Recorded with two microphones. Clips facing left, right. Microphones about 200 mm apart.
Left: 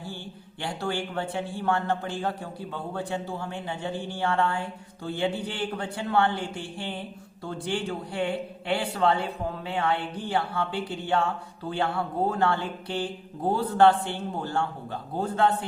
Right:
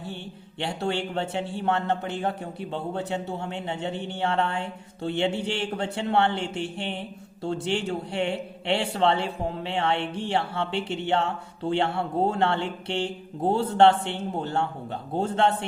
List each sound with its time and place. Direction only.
0.6 s a man's voice: 25° right (ahead or behind)